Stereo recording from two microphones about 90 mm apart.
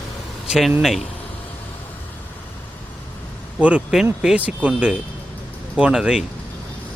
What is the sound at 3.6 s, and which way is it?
Speech, 15° right (ahead or behind).